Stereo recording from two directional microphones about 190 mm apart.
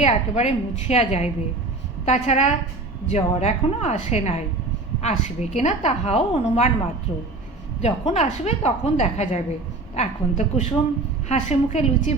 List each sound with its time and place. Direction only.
0.0 s a woman's voice: 35° left (ahead or behind)
7.8 s a woman's voice: 35° left (ahead or behind)